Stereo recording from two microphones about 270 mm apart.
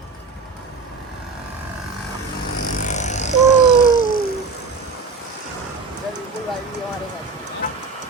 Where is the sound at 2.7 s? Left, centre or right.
Left.